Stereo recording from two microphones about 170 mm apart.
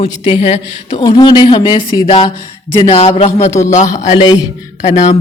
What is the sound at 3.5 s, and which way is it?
Speech, 15° left (ahead or behind).